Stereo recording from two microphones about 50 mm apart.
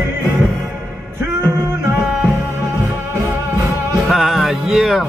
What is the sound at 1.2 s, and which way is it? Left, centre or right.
Music, right.